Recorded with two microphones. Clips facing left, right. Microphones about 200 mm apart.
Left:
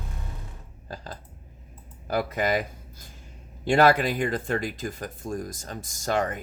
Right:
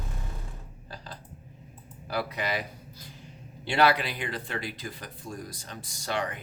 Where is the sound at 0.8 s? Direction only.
45° left (ahead or behind).